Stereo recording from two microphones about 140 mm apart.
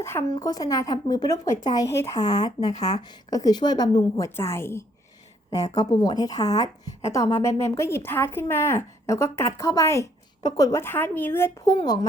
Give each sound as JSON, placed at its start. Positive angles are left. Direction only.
{"t": 0.0, "sound": "a woman's voice", "side_deg": 20}
{"t": 4.4, "sound": "a woman's voice", "side_deg": 20}
{"t": 5.7, "sound": "a woman's voice", "side_deg": 30}
{"t": 11.6, "sound": "a woman's voice", "side_deg": 25}